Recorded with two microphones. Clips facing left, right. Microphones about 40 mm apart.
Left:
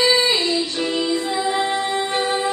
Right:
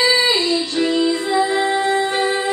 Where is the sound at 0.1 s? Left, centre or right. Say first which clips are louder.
Right 2 dB; right.